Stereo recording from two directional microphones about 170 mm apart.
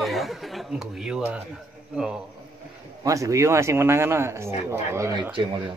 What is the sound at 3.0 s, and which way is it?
Speech, 20° right (ahead or behind).